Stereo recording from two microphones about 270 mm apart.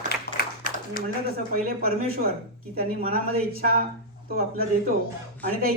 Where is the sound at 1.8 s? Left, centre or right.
Right.